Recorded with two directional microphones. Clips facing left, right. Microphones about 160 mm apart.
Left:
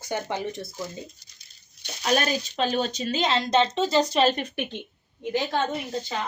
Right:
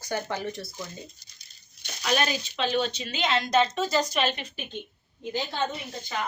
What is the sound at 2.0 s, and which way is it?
Speech, 40° left (ahead or behind).